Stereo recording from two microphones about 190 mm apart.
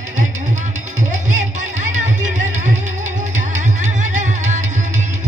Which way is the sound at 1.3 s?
40° right (ahead or behind).